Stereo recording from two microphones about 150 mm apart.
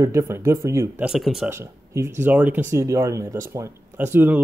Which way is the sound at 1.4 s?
15° right (ahead or behind).